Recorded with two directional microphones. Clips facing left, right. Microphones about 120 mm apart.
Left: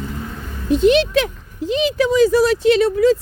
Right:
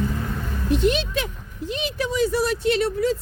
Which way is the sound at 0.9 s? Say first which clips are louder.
Left 9 dB; 85° left.